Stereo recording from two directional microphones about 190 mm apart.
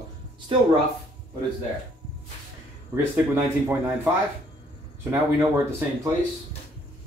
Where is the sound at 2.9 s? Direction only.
10° right (ahead or behind).